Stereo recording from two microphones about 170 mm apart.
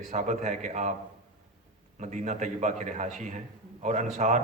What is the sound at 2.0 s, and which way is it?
A man's voice, 45° right (ahead or behind).